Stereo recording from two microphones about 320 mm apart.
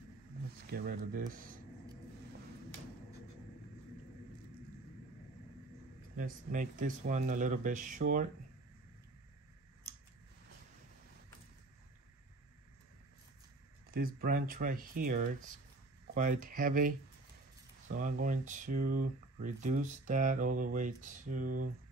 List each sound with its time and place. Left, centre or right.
0.7 s speech: right
6.1 s speech: right
13.9 s speech: right
17.9 s speech: right